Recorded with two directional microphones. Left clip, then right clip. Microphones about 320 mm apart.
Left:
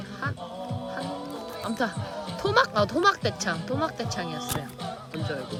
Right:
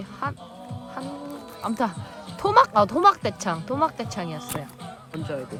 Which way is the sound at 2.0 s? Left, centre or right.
Centre.